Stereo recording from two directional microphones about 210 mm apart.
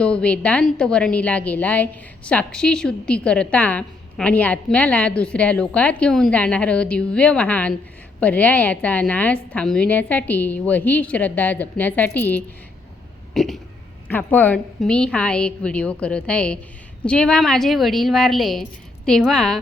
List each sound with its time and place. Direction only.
0.0 s a woman's voice: 5° left (ahead or behind)